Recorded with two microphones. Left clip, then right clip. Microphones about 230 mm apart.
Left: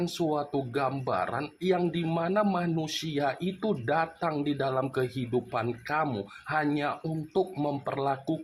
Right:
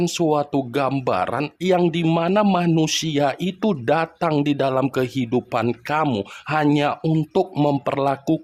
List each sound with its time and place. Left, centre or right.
0.0 s speech: right